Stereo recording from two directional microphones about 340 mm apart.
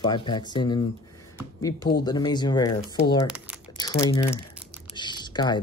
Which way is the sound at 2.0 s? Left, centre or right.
Centre.